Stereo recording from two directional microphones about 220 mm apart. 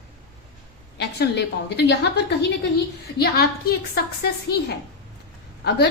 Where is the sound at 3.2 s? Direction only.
45° left (ahead or behind).